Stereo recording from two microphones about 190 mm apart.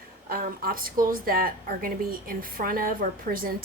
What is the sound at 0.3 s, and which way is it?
A woman's voice, 50° right (ahead or behind).